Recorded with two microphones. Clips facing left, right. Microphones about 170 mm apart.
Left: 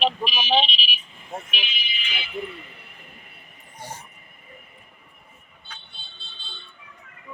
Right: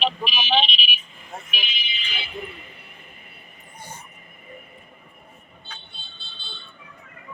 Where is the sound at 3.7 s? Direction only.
90° left.